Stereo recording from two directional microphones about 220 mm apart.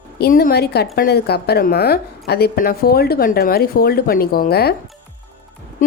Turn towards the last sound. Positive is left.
turn(degrees=45)  # may be behind; listen again after turning